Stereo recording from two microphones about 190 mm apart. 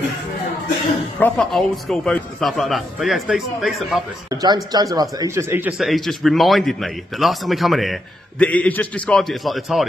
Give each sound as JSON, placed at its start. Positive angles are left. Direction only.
{"t": 1.2, "sound": "a man's voice", "side_deg": 0}
{"t": 4.3, "sound": "a man's voice", "side_deg": -20}